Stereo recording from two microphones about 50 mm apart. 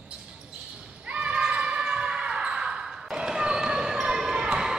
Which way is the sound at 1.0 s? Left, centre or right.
Right.